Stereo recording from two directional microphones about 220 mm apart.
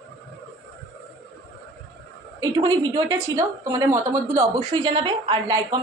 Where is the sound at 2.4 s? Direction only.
20° right (ahead or behind).